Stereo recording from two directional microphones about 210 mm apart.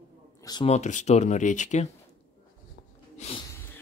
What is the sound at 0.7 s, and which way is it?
Speech, 35° left (ahead or behind).